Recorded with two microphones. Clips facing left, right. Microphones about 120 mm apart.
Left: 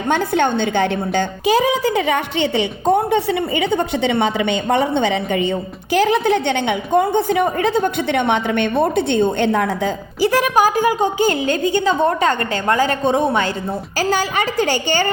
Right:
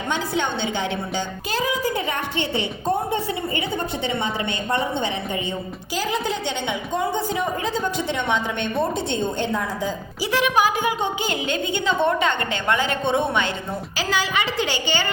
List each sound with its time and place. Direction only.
0.1 s a woman's voice: 55° left (ahead or behind)
1.5 s a woman's voice: 75° left (ahead or behind)
10.2 s a woman's voice: 45° left (ahead or behind)